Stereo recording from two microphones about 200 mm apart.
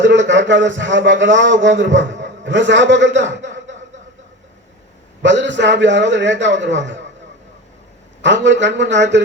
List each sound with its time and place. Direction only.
0.0 s a man's voice: 65° right (ahead or behind)
5.2 s a man's voice: 65° right (ahead or behind)
8.2 s a man's voice: 65° right (ahead or behind)